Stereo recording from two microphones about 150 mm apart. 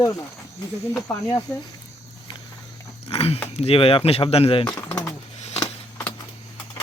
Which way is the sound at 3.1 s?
40° left (ahead or behind).